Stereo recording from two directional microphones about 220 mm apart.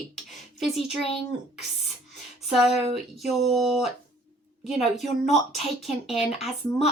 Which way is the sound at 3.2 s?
Centre (ahead or behind).